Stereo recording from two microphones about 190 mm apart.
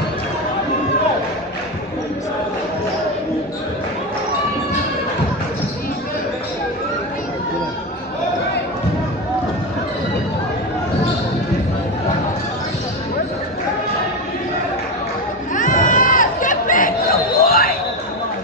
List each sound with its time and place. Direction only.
15.5 s chatter: 45° left (ahead or behind)